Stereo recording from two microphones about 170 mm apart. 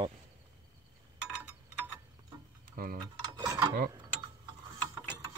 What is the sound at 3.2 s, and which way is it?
Mechanisms, 20° right (ahead or behind).